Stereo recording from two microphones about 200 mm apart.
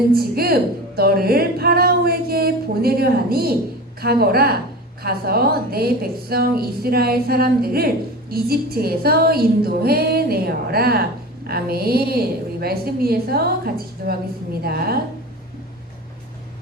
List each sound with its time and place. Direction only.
0.1 s a woman's voice: 50° right (ahead or behind)